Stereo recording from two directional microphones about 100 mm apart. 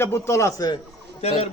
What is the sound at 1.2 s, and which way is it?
Speech, 85° left.